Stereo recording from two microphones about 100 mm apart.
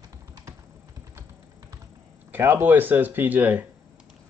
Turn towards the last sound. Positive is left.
turn(degrees=-15)  # may be behind; listen again after turning